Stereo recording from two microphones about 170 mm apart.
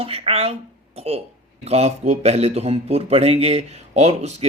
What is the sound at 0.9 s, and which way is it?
Speech, 35° right (ahead or behind).